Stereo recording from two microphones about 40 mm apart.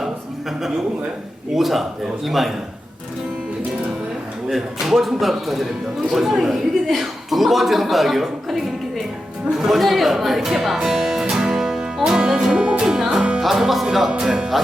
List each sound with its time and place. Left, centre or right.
1.5 s a man's voice: centre
4.4 s a man's voice: centre
9.6 s music: centre
13.4 s speech: centre
14.2 s music: centre